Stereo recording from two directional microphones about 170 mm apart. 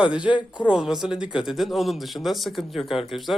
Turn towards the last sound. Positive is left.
turn(degrees=0)  # may be behind; listen again after turning